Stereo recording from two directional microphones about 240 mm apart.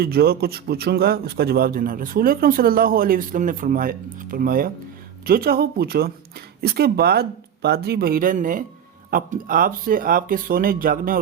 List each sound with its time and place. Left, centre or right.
0.0 s a man's voice: right